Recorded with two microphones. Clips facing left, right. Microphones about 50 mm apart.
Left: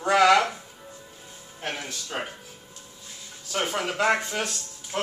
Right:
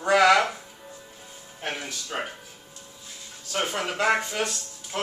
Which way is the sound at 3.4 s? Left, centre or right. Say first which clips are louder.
Even; centre.